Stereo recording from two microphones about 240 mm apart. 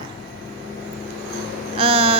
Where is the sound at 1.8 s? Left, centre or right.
Right.